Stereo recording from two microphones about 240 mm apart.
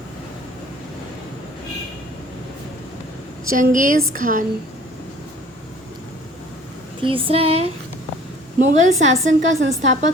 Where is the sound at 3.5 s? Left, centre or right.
Right.